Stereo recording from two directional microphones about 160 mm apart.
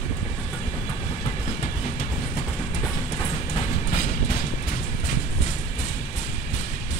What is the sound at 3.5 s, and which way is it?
Train, 35° left (ahead or behind).